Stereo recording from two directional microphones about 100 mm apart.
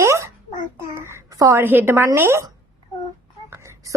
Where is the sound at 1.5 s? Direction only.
20° right (ahead or behind).